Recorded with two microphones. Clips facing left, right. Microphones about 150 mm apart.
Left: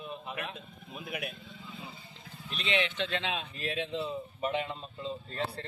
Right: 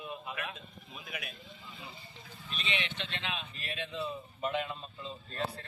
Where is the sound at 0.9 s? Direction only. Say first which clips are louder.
Left 6 dB; 60° left (ahead or behind).